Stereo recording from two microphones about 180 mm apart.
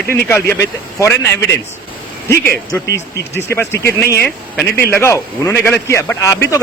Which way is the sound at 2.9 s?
15° left (ahead or behind).